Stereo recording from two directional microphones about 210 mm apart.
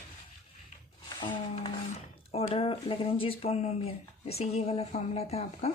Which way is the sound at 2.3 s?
25° left (ahead or behind).